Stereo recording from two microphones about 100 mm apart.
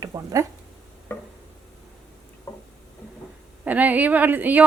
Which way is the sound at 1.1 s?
25° left (ahead or behind).